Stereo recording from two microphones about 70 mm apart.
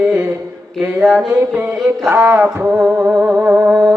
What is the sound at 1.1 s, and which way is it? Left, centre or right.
Male singing, centre.